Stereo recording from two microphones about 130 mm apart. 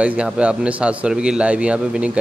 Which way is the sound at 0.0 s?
10° right (ahead or behind).